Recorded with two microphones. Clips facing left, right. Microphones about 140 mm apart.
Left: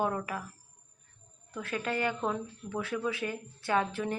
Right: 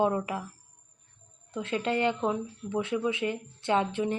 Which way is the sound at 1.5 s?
25° right (ahead or behind).